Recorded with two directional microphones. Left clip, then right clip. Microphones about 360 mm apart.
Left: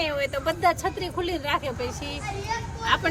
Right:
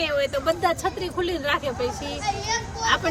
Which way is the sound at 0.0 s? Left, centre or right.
Centre.